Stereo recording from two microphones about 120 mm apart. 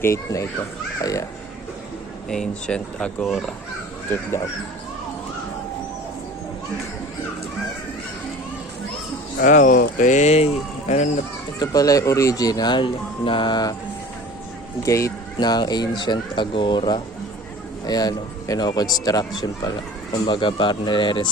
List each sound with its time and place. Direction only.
0.0 s a child's voice: 25° left (ahead or behind)
2.3 s speech: 5° left (ahead or behind)
9.5 s speech: 90° left; by 11.1 s 70° left (ahead or behind)
11.6 s speech: 30° left (ahead or behind)
14.8 s a child's voice: 25° left (ahead or behind)
15.4 s speech: 35° left (ahead or behind)
20.2 s speech: 40° left (ahead or behind)